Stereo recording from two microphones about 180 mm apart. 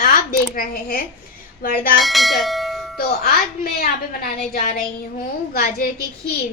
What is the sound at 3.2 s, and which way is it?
A woman's voice, 55° left (ahead or behind).